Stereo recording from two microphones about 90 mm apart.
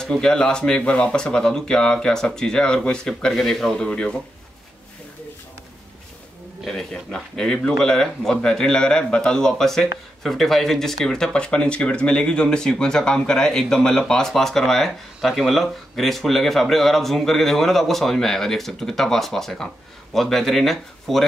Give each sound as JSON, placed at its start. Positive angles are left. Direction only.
{"t": 0.0, "sound": "speech", "side_deg": 5}
{"t": 6.6, "sound": "speech", "side_deg": 5}